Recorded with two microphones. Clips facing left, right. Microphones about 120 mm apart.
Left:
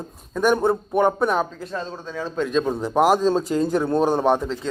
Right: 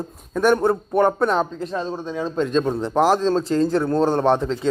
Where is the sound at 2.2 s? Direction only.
5° left (ahead or behind).